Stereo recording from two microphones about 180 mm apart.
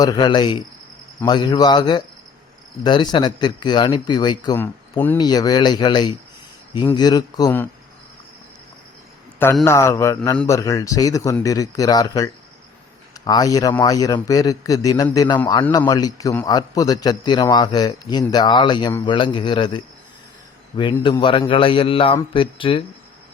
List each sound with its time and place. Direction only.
0.0 s a man's voice: 25° left (ahead or behind)
4.5 s speech: 10° left (ahead or behind)
5.1 s a man's voice: 20° left (ahead or behind)
9.6 s a man's voice: 15° left (ahead or behind)
21.0 s a man's voice: 25° left (ahead or behind)